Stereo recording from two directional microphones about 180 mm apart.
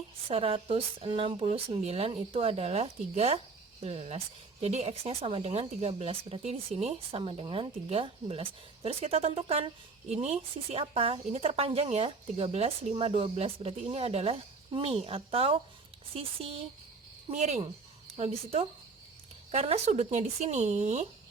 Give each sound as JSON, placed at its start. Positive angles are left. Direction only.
{"t": 0.3, "sound": "speech", "side_deg": -30}